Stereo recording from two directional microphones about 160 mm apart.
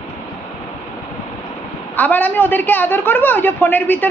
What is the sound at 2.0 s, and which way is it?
A woman's voice, 10° left (ahead or behind).